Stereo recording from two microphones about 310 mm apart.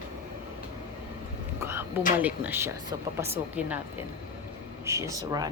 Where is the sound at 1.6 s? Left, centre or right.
Centre.